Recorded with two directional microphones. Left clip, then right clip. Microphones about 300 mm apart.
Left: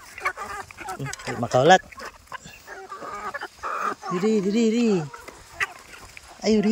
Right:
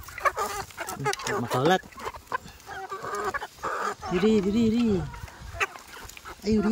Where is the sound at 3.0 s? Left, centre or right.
Right.